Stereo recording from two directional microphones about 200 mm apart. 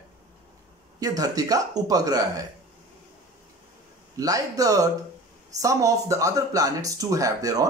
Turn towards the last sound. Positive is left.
turn(degrees=-15)  # may be behind; listen again after turning